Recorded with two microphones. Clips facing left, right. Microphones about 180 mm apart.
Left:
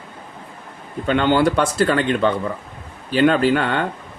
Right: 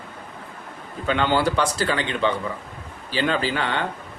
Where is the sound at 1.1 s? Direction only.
50° left (ahead or behind).